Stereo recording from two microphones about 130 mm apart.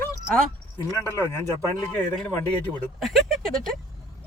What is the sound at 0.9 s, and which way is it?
Speech, 20° left (ahead or behind).